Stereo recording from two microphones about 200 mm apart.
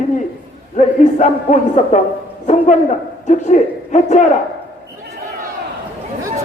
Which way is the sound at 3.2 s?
35° left (ahead or behind).